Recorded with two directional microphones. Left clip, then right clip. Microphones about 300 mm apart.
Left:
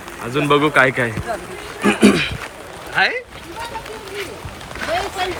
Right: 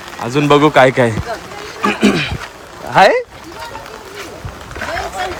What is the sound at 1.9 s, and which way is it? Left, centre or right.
Dog, centre.